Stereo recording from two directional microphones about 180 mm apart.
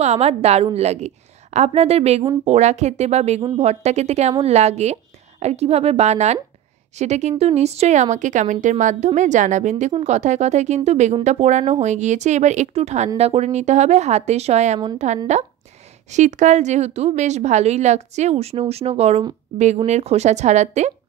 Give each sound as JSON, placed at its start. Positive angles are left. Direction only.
{"t": 0.0, "sound": "speech", "side_deg": -35}